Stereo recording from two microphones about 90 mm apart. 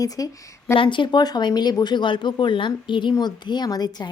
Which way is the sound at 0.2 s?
40° left (ahead or behind).